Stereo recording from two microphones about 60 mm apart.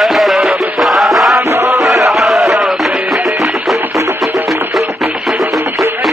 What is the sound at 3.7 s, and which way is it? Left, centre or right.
Music, right.